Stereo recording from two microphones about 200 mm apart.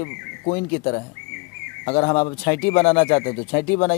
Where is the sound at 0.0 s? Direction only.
20° left (ahead or behind).